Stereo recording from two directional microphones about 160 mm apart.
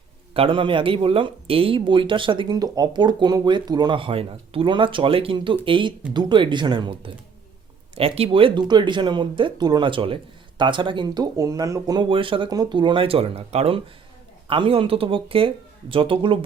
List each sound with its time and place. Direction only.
0.3 s speech: 35° right (ahead or behind)